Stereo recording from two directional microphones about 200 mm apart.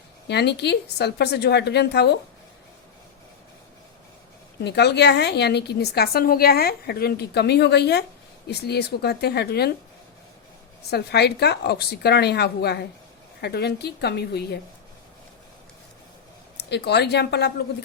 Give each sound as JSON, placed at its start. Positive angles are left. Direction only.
{"t": 0.3, "sound": "a woman's voice", "side_deg": 55}
{"t": 4.6, "sound": "a woman's voice", "side_deg": 55}
{"t": 10.9, "sound": "a woman's voice", "side_deg": 55}
{"t": 16.6, "sound": "a woman's voice", "side_deg": 55}